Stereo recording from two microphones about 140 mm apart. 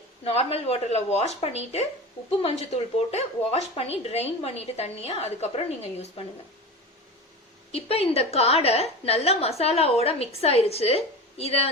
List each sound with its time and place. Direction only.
0.3 s a woman's voice: 45° left (ahead or behind)
3.1 s a woman's voice: 50° left (ahead or behind)
7.7 s a woman's voice: 45° left (ahead or behind)